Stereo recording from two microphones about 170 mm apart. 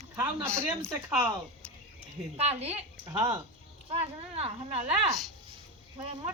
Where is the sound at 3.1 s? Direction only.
20° right (ahead or behind).